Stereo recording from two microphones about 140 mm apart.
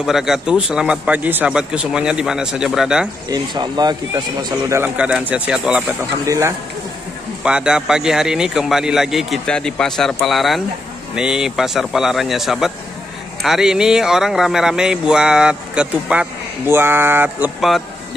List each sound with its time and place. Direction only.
0.0 s a man's voice: 5° right (ahead or behind)
3.3 s speech: 30° right (ahead or behind)
4.7 s a man's voice: 10° right (ahead or behind)
6.2 s a man's voice: 20° right (ahead or behind)
7.4 s a man's voice: 5° right (ahead or behind)
17.6 s a man's voice: centre (ahead or behind)